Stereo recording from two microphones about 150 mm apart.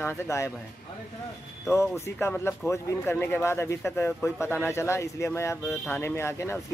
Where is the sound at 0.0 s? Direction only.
20° left (ahead or behind).